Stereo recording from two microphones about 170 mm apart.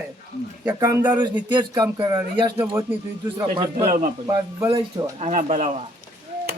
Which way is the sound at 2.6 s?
15° right (ahead or behind).